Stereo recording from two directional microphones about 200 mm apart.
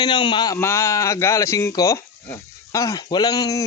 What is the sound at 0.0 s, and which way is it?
A man's voice, 25° left (ahead or behind).